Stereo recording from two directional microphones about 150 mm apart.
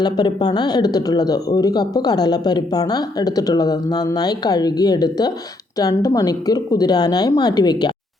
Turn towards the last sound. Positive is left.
turn(degrees=30)  # may be behind; listen again after turning